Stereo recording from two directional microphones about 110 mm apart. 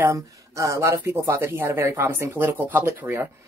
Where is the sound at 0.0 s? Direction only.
30° right (ahead or behind).